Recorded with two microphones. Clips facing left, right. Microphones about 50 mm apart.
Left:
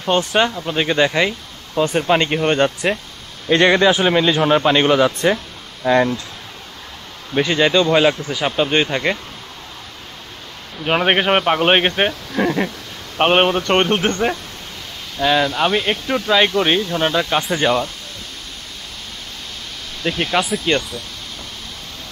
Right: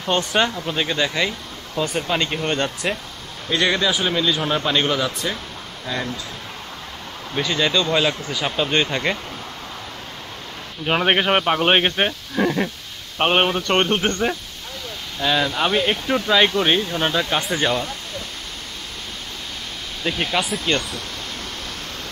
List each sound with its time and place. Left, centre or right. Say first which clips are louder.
0.0 s speech: left 3 dB; centre
0.7 s speech: left 6 dB; centre
7.3 s speech: left 5 dB; left
10.9 s speech: left 2 dB; centre
20.0 s speech: left 3 dB; centre